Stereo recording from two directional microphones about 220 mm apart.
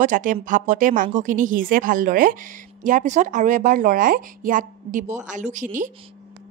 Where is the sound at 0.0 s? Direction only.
35° right (ahead or behind).